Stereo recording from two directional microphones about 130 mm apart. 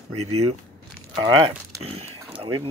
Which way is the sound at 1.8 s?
50° right (ahead or behind).